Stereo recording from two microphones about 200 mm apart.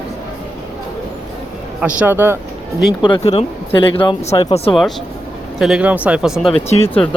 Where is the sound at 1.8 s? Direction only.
10° right (ahead or behind).